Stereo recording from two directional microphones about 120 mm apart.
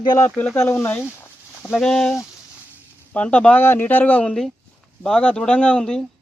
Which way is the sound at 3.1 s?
10° left (ahead or behind).